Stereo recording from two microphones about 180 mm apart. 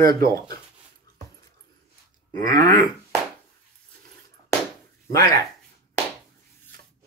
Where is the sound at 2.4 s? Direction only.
25° left (ahead or behind).